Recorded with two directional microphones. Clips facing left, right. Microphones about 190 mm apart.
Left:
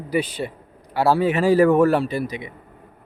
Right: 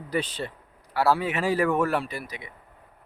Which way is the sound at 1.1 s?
35° left (ahead or behind).